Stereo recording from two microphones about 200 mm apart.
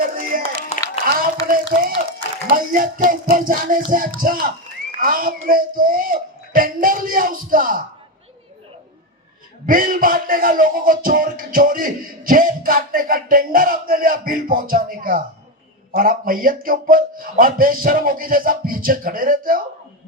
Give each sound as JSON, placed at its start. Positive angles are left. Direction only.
{"t": 0.0, "sound": "clapping", "side_deg": -45}
{"t": 1.0, "sound": "a sound", "side_deg": -45}
{"t": 2.5, "sound": "a man's voice", "side_deg": -45}
{"t": 9.6, "sound": "a man's voice", "side_deg": -45}